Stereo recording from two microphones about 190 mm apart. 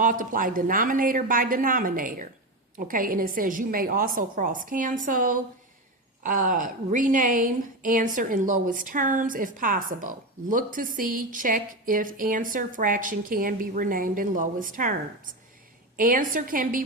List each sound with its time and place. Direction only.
0.0 s speech: 45° right (ahead or behind)